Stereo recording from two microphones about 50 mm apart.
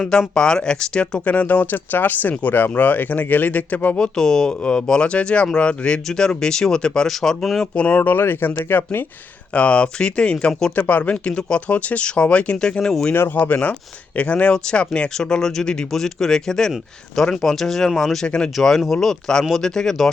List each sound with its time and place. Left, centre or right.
0.0 s speech: centre
1.2 s speech: left
3.9 s speech: centre
7.1 s speech: centre
7.8 s speech: left
8.2 s speech: left
9.5 s speech: left
10.8 s speech: left; by 12.9 s centre
13.3 s speech: left
14.5 s speech: centre
18.3 s speech: centre
18.6 s speech: centre